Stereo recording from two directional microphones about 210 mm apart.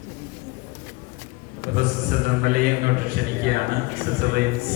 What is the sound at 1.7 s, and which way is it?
A man's voice, 40° right (ahead or behind).